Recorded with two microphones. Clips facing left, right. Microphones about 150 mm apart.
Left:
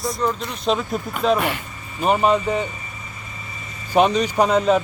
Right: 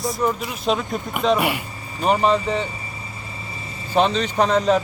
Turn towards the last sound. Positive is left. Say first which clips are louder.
# left 1 dB
turn(degrees=5)  # may be behind; listen again after turning